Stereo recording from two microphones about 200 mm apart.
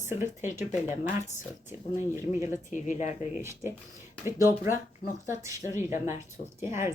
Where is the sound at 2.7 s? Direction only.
40° left (ahead or behind).